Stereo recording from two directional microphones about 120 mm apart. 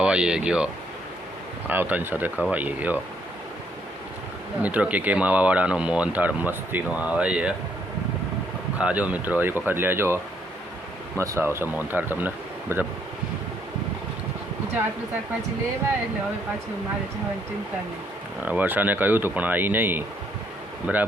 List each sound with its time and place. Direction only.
0.0 s speech: 10° right (ahead or behind)
4.6 s speech: 10° right (ahead or behind)
8.8 s speech: 10° right (ahead or behind)
11.2 s speech: 20° right (ahead or behind)
18.4 s speech: 15° right (ahead or behind)